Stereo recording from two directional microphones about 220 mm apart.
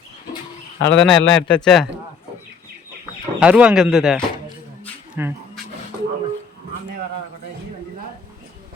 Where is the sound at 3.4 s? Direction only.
5° right (ahead or behind).